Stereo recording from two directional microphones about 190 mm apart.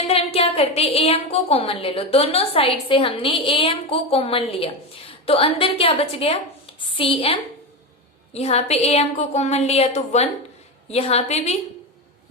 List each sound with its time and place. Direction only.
0.1 s a woman's voice: 30° left (ahead or behind)